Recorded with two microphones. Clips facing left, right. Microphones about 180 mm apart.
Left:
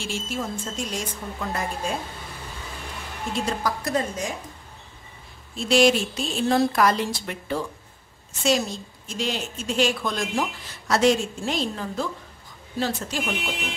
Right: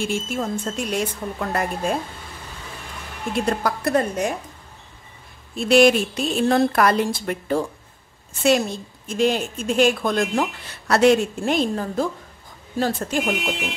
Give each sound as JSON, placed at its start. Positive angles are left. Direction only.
{"t": 0.0, "sound": "a woman's voice", "side_deg": -55}
{"t": 3.3, "sound": "a woman's voice", "side_deg": -60}
{"t": 5.6, "sound": "a woman's voice", "side_deg": -55}
{"t": 8.4, "sound": "a woman's voice", "side_deg": -60}